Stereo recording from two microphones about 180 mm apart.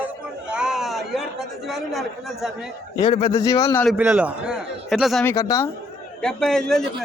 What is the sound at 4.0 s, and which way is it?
Speech, 10° right (ahead or behind).